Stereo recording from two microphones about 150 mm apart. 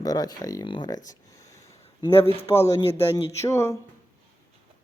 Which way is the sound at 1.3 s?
20° left (ahead or behind).